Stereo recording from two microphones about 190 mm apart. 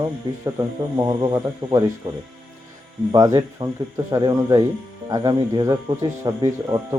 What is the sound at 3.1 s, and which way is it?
Speech, 20° right (ahead or behind).